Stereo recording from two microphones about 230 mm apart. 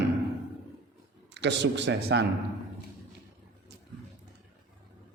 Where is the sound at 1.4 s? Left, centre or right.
Right.